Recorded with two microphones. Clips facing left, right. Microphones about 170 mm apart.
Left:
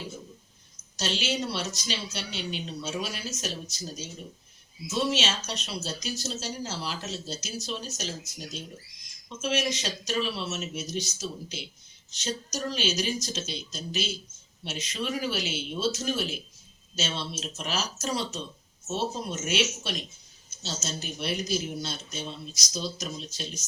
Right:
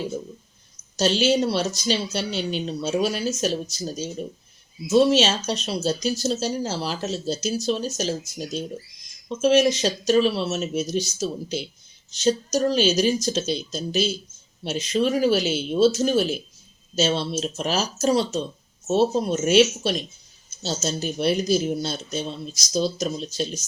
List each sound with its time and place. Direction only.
0.9 s speech: 35° right (ahead or behind)
9.4 s speech: 35° right (ahead or behind)